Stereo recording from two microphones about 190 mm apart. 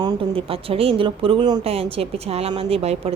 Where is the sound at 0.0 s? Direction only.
30° right (ahead or behind).